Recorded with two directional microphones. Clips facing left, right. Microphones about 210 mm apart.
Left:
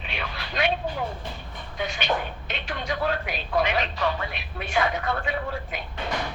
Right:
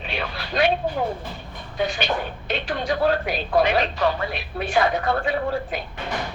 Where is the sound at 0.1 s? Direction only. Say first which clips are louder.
Right 6 dB; 35° right (ahead or behind).